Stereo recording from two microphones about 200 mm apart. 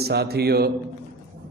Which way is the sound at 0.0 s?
50° right (ahead or behind).